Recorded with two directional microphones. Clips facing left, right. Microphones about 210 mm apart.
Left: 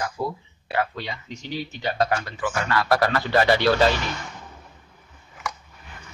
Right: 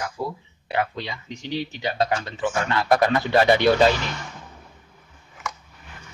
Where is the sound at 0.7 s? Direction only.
20° right (ahead or behind).